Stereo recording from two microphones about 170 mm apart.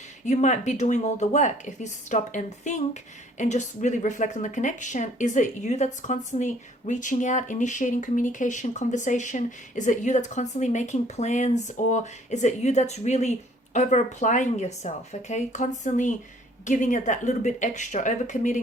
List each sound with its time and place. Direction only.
0.3 s speech: 45° left (ahead or behind)